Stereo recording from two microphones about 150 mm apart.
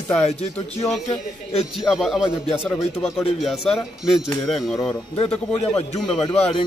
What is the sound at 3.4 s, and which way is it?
Speech, centre (ahead or behind).